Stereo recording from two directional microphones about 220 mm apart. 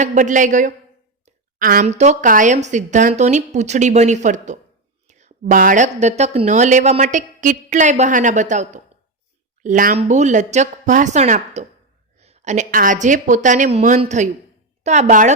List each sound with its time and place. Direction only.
0.0 s a woman's voice: 35° right (ahead or behind)